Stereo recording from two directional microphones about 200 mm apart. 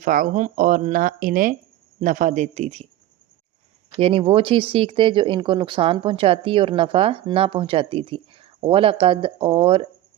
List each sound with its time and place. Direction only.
0.0 s speech: 40° right (ahead or behind)
4.0 s speech: 30° right (ahead or behind)